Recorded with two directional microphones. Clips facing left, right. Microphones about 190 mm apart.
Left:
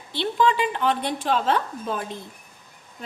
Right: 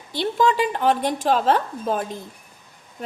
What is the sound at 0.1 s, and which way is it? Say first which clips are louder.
A woman's voice: right 2 dB; 45° right (ahead or behind).